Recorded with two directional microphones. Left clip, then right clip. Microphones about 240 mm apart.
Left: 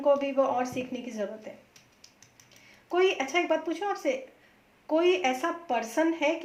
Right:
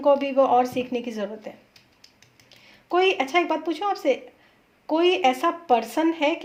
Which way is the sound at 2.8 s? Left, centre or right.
Right.